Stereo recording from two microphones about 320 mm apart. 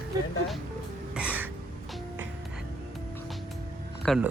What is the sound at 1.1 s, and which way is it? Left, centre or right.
Music, centre.